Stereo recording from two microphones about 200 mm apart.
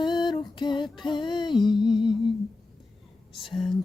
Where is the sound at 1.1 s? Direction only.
20° left (ahead or behind).